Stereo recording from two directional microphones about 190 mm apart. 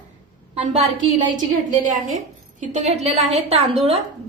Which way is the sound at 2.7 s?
35° right (ahead or behind).